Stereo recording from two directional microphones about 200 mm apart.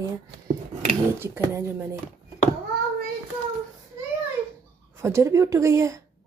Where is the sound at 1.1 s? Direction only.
10° right (ahead or behind).